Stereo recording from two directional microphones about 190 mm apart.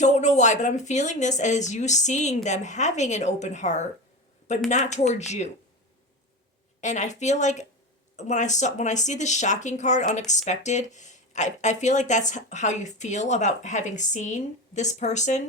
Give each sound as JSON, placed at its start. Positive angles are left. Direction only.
{"t": 0.0, "sound": "speech", "side_deg": 40}
{"t": 6.8, "sound": "speech", "side_deg": 40}